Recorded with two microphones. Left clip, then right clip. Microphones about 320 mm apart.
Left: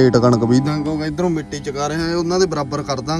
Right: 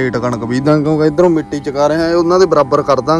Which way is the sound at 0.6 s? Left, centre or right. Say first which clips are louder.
Right 10 dB; centre.